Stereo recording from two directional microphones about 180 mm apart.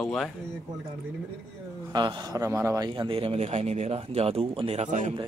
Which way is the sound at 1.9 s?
20° right (ahead or behind).